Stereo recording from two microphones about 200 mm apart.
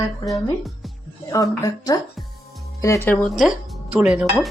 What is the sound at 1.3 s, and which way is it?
Speech, 15° left (ahead or behind).